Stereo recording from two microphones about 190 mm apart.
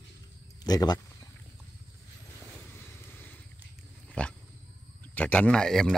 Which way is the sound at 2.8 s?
10° left (ahead or behind).